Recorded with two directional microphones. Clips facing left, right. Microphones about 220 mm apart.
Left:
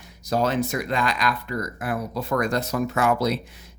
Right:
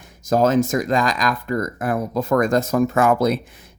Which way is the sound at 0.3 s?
45° right (ahead or behind).